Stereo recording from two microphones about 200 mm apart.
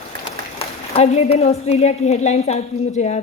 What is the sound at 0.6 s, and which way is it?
A woman's voice, 30° left (ahead or behind).